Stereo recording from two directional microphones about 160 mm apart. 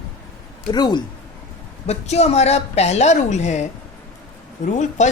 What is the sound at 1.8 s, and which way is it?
A woman's voice, 40° left (ahead or behind).